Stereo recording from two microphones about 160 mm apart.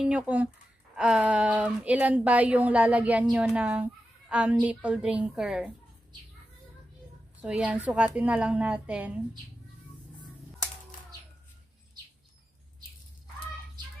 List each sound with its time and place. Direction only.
0.0 s a woman's voice: 10° right (ahead or behind)
7.4 s a woman's voice: 10° right (ahead or behind)